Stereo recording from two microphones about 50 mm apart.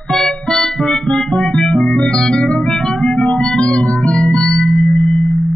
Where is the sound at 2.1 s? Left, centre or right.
Centre.